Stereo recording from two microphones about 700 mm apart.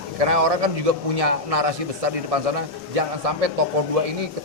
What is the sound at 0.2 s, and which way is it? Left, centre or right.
A man's voice, right.